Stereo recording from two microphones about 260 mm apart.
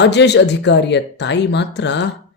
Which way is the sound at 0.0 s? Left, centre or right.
Left.